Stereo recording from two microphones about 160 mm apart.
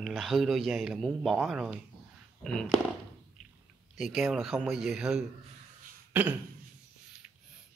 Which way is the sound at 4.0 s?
5° right (ahead or behind).